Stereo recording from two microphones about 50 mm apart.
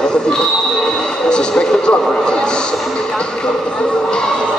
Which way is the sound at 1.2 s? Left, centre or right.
Centre.